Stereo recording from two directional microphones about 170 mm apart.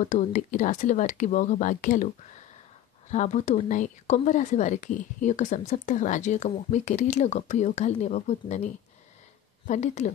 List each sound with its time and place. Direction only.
0.0 s speech: 45° left (ahead or behind)
3.1 s speech: 45° left (ahead or behind)